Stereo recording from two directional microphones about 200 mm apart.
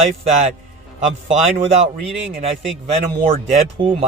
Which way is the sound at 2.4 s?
30° right (ahead or behind).